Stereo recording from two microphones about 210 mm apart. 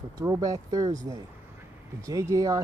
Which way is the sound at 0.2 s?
15° right (ahead or behind).